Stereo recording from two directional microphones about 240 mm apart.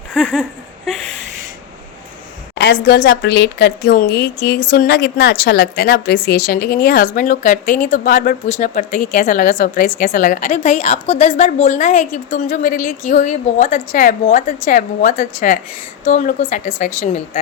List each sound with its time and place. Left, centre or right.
0.1 s speech: centre
2.6 s a woman's voice: left